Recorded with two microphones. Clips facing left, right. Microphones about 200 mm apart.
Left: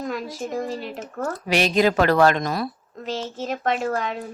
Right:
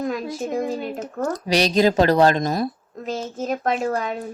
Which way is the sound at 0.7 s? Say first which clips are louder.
Right 4 dB; 50° right (ahead or behind).